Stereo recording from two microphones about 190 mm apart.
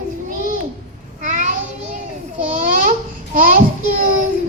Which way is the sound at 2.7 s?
45° right (ahead or behind).